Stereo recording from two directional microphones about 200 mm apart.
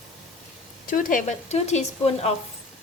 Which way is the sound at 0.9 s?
40° left (ahead or behind).